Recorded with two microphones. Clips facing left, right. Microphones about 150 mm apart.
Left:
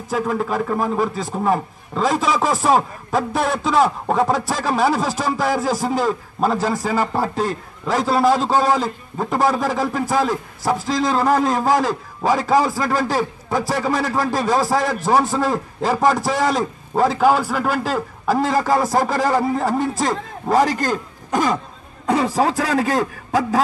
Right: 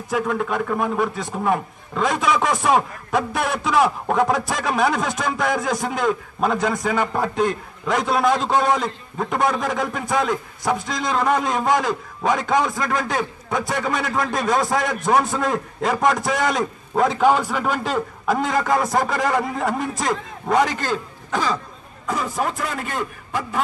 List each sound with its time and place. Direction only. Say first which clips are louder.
0.1 s a man's voice: left 1 dB; centre (ahead or behind)
2.1 s a man's voice: left 1 dB; 30° left (ahead or behind)
2.4 s a man's voice: left 2 dB; centre (ahead or behind)
5.9 s a man's voice: left 1 dB; 30° left (ahead or behind)
6.5 s a man's voice: right 1 dB; 5° left (ahead or behind)
18.5 s a man's voice: left 2 dB; 30° left (ahead or behind); by 21.5 s 45° left (ahead or behind)
22.0 s a man's voice: left 7 dB; 75° left (ahead or behind)
22.4 s a man's voice: left 7 dB; 90° left